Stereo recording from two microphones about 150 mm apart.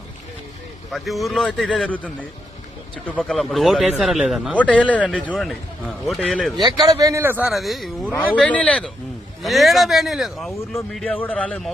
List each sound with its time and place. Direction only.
0.9 s a man's voice: centre (ahead or behind)
3.1 s a man's voice: centre (ahead or behind)
4.5 s a man's voice: 10° left (ahead or behind)
6.6 s speech: 25° right (ahead or behind)
7.5 s a man's voice: centre (ahead or behind)
8.1 s a man's voice: 10° left (ahead or behind)